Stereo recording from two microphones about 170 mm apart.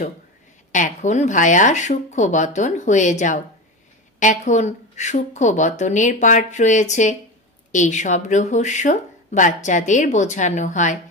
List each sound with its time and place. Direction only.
0.7 s speech: 45° left (ahead or behind)